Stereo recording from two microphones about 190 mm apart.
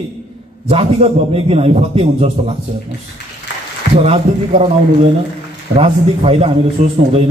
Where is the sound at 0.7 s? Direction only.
30° right (ahead or behind).